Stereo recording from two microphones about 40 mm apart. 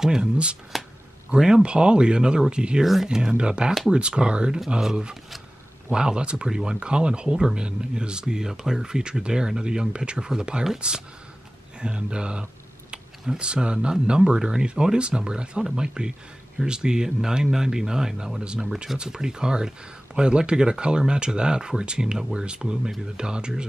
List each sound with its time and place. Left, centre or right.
0.0 s speech: right
2.8 s speech: centre
3.2 s speech: right